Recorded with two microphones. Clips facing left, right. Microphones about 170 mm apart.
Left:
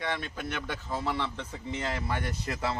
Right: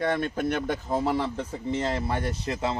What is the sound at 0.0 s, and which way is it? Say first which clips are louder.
Speech: right 8 dB; 50° right (ahead or behind).